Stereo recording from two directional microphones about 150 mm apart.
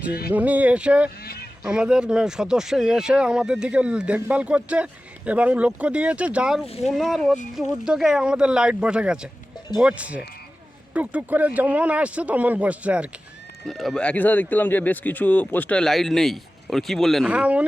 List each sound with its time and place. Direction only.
0.3 s speech: 10° right (ahead or behind)
1.2 s a sound: 90° left
1.6 s speech: 5° right (ahead or behind)